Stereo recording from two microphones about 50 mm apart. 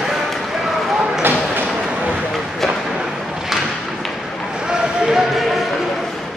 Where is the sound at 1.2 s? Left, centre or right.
Right.